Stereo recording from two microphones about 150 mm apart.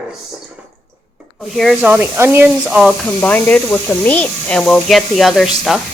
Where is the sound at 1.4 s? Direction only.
Centre (ahead or behind).